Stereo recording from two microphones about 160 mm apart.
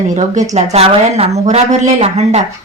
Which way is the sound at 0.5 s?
45° right (ahead or behind).